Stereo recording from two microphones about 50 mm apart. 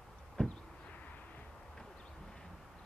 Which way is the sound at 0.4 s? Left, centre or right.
Centre.